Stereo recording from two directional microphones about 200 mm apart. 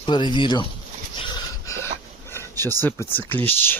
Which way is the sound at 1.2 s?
20° left (ahead or behind).